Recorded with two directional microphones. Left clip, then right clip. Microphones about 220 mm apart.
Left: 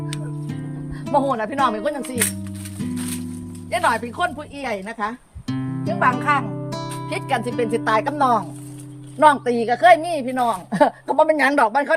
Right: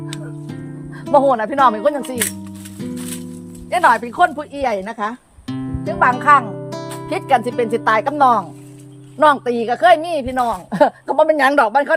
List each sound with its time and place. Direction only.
0.1 s music: centre (ahead or behind)
1.1 s speech: 15° right (ahead or behind)
2.0 s speech: centre (ahead or behind)
3.7 s speech: 15° right (ahead or behind)
5.5 s music: centre (ahead or behind)
6.0 s speech: 15° right (ahead or behind)
6.7 s music: centre (ahead or behind)
7.1 s speech: 15° right (ahead or behind)